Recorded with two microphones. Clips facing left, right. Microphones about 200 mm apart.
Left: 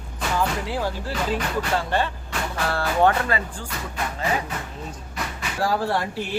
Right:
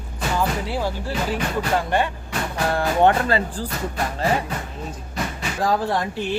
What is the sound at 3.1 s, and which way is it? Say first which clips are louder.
Speech: right 4 dB; 30° right (ahead or behind).